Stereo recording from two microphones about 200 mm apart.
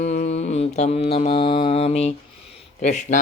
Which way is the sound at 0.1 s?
35° left (ahead or behind).